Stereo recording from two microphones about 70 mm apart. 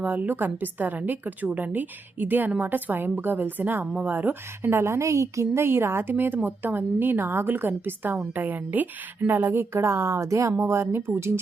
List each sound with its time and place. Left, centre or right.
0.0 s a woman's voice: right